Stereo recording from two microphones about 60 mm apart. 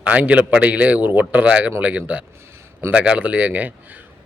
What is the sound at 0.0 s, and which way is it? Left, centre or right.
A man's voice, right.